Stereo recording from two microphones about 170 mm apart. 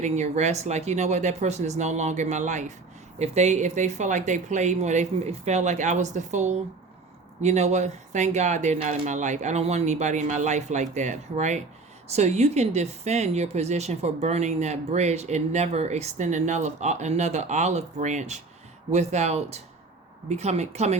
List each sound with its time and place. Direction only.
0.0 s speech: 40° right (ahead or behind)